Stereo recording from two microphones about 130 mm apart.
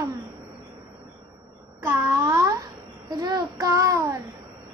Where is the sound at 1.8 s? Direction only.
20° right (ahead or behind).